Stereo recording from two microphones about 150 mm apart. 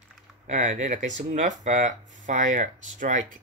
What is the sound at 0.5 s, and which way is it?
Speech, 55° right (ahead or behind).